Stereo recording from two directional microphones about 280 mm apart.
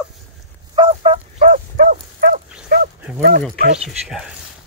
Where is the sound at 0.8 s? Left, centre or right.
Right.